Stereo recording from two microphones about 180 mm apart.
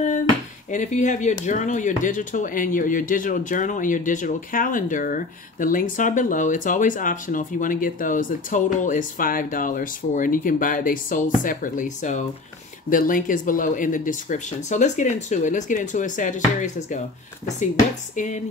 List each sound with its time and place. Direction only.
0.7 s speech: 40° left (ahead or behind)
18.1 s speech: 45° left (ahead or behind)